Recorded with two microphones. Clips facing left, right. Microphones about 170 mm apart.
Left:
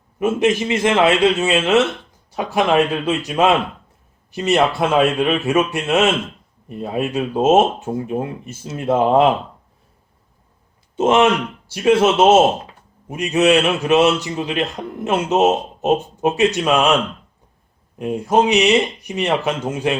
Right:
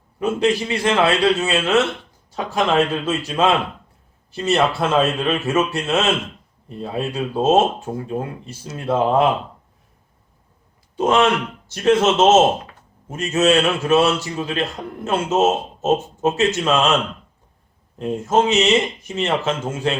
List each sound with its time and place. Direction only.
0.2 s a man's voice: 20° left (ahead or behind)
10.9 s speech: 20° left (ahead or behind)
11.7 s a man's voice: 10° left (ahead or behind)
17.9 s a man's voice: 15° left (ahead or behind)